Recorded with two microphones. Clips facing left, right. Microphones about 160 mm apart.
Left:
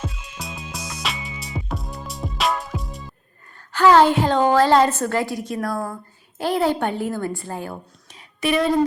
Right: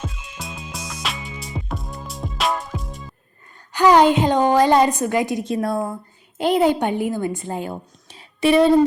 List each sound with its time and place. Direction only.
0.0 s music: centre (ahead or behind)
3.7 s a woman's voice: 15° right (ahead or behind)